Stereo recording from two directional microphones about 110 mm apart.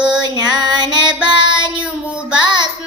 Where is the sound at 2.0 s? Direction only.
10° right (ahead or behind).